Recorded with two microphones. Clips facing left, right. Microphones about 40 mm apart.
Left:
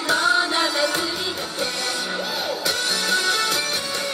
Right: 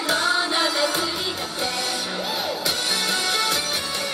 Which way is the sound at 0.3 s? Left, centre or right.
Centre.